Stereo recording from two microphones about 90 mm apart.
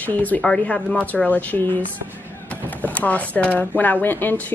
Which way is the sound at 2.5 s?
20° left (ahead or behind).